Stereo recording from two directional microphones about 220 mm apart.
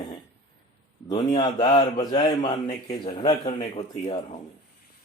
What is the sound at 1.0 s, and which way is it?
A man's voice, 15° left (ahead or behind).